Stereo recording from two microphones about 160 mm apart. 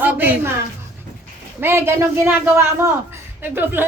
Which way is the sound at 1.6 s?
15° right (ahead or behind).